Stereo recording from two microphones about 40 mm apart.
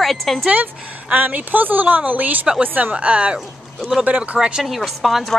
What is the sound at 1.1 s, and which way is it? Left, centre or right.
Speech, right.